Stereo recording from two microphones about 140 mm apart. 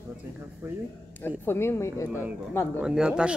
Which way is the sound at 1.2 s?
15° left (ahead or behind).